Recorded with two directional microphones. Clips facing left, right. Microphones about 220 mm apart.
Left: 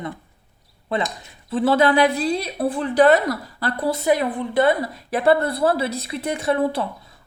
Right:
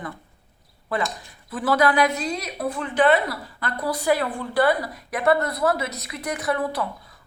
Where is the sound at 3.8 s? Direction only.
25° left (ahead or behind).